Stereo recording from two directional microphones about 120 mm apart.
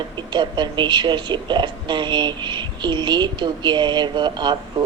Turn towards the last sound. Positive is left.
turn(degrees=-40)  # may be behind; listen again after turning